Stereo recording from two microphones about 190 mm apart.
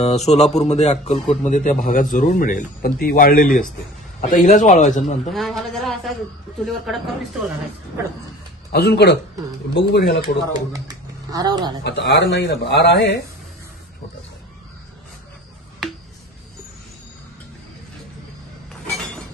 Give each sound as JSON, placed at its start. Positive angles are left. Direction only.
{"t": 0.0, "sound": "a man's voice", "side_deg": 35}
{"t": 5.3, "sound": "a man's voice", "side_deg": 0}
{"t": 8.7, "sound": "speech", "side_deg": 60}
{"t": 11.3, "sound": "speech", "side_deg": -20}
{"t": 11.8, "sound": "speech", "side_deg": 65}